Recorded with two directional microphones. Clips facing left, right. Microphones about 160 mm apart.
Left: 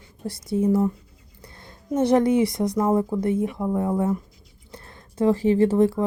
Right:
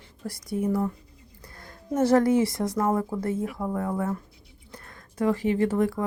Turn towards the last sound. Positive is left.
turn(degrees=30)  # may be behind; listen again after turning